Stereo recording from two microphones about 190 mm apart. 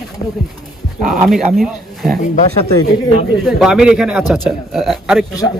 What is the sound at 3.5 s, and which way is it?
Speech, 5° right (ahead or behind).